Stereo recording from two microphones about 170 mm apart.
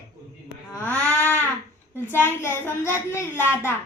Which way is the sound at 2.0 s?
15° left (ahead or behind).